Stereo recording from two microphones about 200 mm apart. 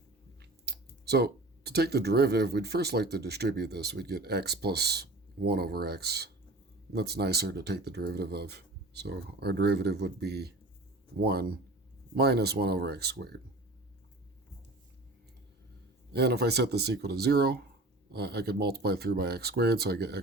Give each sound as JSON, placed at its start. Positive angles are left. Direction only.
{"t": 0.6, "sound": "speech", "side_deg": -55}
{"t": 16.1, "sound": "speech", "side_deg": -55}